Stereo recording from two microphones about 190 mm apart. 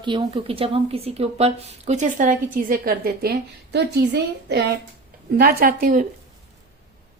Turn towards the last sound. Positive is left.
turn(degrees=-45)  # may be behind; listen again after turning